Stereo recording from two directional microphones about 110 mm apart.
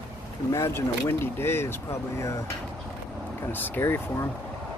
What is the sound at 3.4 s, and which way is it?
Speech, 20° left (ahead or behind).